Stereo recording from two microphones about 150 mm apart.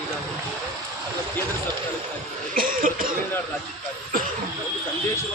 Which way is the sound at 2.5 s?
70° right (ahead or behind).